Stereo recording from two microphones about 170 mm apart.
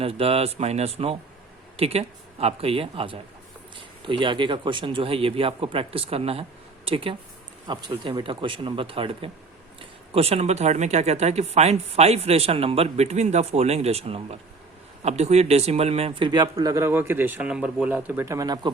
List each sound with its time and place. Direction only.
0.0 s a man's voice: 35° right (ahead or behind)